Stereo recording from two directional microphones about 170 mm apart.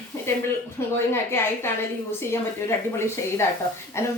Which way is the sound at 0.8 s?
15° left (ahead or behind).